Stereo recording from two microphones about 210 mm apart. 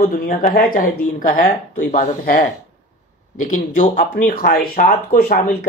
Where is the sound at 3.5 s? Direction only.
35° left (ahead or behind).